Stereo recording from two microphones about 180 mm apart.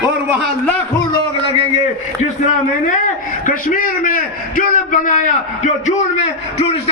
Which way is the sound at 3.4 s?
45° left (ahead or behind).